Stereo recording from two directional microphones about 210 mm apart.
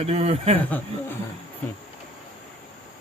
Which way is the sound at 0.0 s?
30° right (ahead or behind).